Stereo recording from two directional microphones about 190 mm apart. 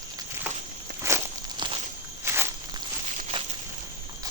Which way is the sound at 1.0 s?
15° right (ahead or behind).